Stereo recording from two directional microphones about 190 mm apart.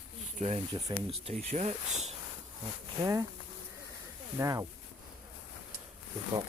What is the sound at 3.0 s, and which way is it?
Speech, 15° right (ahead or behind).